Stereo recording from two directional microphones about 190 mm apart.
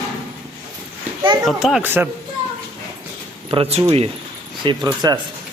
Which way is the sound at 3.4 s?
30° right (ahead or behind).